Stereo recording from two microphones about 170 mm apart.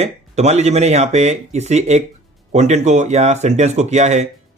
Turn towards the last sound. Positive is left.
turn(degrees=-40)  # may be behind; listen again after turning